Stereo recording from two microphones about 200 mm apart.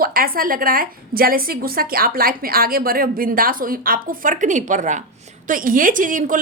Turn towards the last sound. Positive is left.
turn(degrees=-40)  # may be behind; listen again after turning